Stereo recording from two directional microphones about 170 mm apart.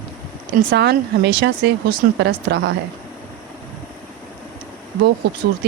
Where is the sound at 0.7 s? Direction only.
75° right (ahead or behind).